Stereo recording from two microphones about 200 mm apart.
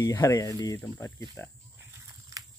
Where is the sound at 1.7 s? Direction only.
15° right (ahead or behind).